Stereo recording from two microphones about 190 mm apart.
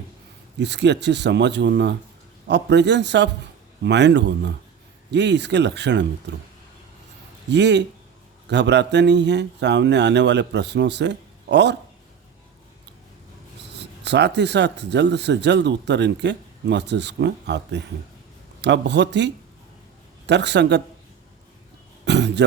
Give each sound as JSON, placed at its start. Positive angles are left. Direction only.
{"t": 0.6, "sound": "speech", "side_deg": -65}
{"t": 7.5, "sound": "speech", "side_deg": -65}
{"t": 13.7, "sound": "speech", "side_deg": -65}
{"t": 22.0, "sound": "a sound", "side_deg": -65}